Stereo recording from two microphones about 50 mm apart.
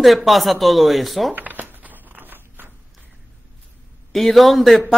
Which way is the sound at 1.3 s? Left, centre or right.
Right.